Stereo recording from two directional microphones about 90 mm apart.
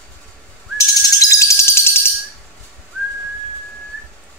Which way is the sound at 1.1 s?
35° left (ahead or behind).